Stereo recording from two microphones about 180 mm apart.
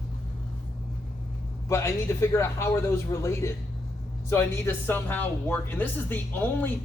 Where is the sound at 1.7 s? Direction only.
15° left (ahead or behind).